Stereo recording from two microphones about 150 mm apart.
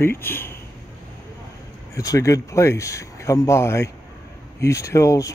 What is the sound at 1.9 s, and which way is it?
Speech, 20° left (ahead or behind).